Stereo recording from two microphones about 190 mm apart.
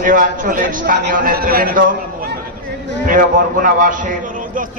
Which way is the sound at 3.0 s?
45° right (ahead or behind).